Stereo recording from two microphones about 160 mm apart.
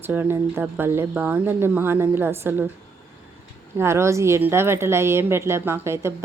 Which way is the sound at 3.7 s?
15° right (ahead or behind).